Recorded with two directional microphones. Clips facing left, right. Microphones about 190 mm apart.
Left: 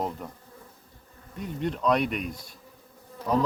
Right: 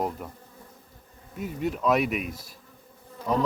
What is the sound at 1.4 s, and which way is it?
Speech, 5° right (ahead or behind).